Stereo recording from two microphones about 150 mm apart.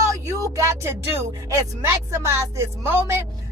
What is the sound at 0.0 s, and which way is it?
A woman's voice, 20° right (ahead or behind).